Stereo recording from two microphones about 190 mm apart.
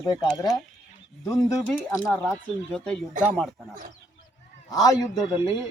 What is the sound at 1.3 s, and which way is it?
Speech, 15° left (ahead or behind).